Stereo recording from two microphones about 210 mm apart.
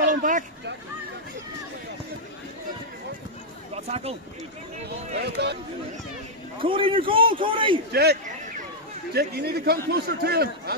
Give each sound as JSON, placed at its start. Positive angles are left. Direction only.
{"t": 0.0, "sound": "a sound", "side_deg": -40}
{"t": 3.7, "sound": "speech", "side_deg": -30}
{"t": 4.8, "sound": "a man's voice", "side_deg": -50}
{"t": 6.6, "sound": "a man's voice", "side_deg": -25}
{"t": 7.9, "sound": "a man's voice", "side_deg": -50}